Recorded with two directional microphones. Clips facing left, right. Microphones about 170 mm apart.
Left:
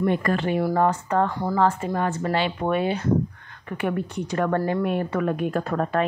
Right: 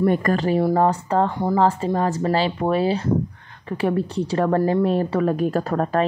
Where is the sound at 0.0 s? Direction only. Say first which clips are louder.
Right 3 dB; 40° right (ahead or behind).